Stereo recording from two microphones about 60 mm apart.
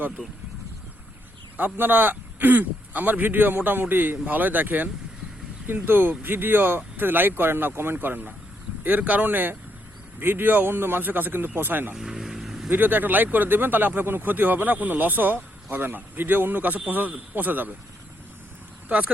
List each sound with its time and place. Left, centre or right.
1.5 s speech: right
11.9 s vehicle: centre
12.7 s speech: right
18.9 s speech: right